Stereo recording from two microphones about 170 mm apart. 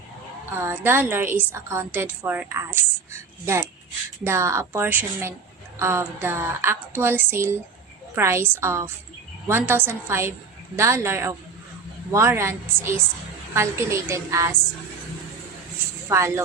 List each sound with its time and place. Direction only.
0.5 s a woman's voice: 10° right (ahead or behind)
16.0 s a woman's voice: 15° right (ahead or behind)